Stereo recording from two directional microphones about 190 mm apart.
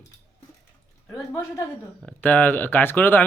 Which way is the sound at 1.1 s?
15° left (ahead or behind).